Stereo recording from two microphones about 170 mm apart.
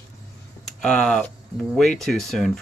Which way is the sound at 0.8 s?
5° left (ahead or behind).